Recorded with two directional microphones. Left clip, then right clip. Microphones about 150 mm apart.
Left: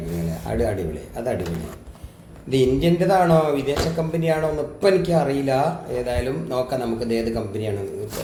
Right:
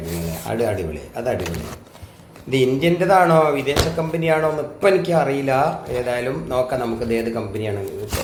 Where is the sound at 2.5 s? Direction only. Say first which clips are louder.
Right 1 dB; 5° right (ahead or behind).